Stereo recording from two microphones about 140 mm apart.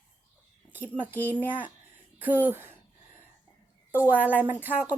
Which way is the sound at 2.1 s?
10° right (ahead or behind).